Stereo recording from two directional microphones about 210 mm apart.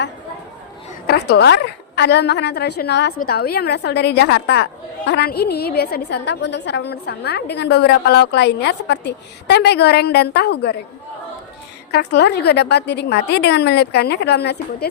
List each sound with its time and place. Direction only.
1.0 s a woman's voice: 50° left (ahead or behind)
11.9 s a woman's voice: 50° left (ahead or behind)